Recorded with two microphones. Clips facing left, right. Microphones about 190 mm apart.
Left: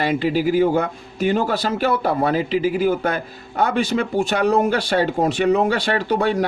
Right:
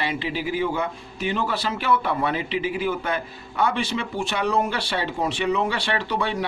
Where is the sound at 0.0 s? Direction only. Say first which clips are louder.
Left 8 dB; 45° left (ahead or behind).